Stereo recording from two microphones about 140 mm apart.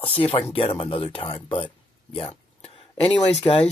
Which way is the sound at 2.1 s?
45° left (ahead or behind).